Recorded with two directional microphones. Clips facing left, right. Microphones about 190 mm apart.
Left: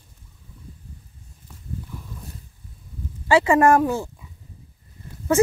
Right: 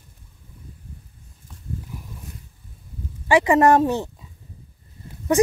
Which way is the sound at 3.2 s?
15° right (ahead or behind).